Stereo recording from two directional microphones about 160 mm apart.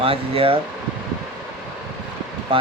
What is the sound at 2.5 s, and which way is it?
Speech, 35° right (ahead or behind).